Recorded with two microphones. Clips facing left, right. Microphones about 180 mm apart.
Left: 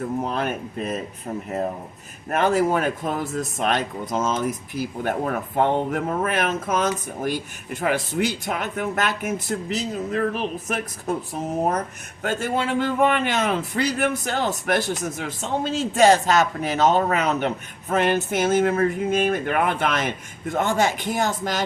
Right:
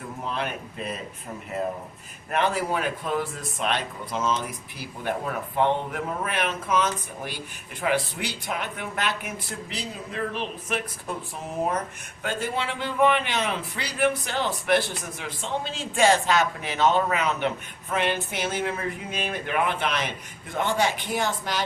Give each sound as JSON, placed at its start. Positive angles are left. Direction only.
{"t": 0.3, "sound": "a man's voice", "side_deg": 45}
{"t": 2.3, "sound": "a man's voice", "side_deg": 45}
{"t": 12.2, "sound": "a man's voice", "side_deg": 45}